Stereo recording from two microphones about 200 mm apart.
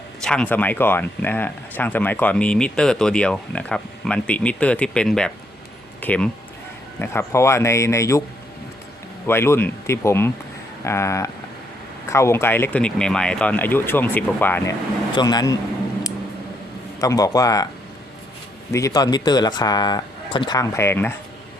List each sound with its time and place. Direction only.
0.2 s speech: 5° left (ahead or behind)
9.2 s speech: 10° left (ahead or behind)
15.1 s a man's voice: 20° left (ahead or behind)
17.0 s speech: 15° left (ahead or behind)
18.7 s speech: 15° left (ahead or behind)